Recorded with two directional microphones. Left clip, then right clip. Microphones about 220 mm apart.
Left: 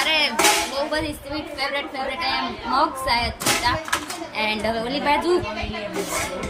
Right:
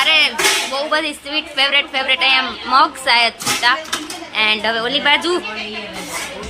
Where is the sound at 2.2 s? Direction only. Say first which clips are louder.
Right 8 dB; 30° right (ahead or behind).